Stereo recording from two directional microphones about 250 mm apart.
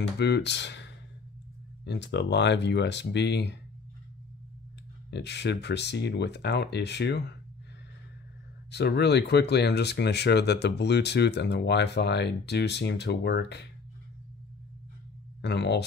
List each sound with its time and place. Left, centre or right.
0.2 s speech: left
5.1 s speech: left
8.7 s speech: left
15.4 s speech: left